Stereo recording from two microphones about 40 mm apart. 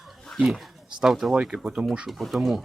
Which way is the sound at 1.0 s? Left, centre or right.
Centre.